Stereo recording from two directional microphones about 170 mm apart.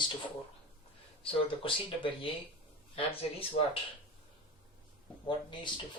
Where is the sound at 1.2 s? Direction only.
30° left (ahead or behind).